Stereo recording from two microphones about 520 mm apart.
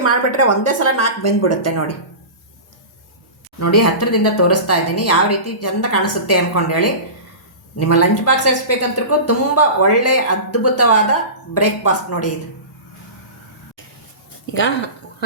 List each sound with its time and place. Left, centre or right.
0.0 s speech: left
3.6 s speech: left